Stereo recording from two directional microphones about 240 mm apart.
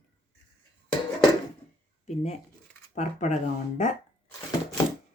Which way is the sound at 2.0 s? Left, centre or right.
Left.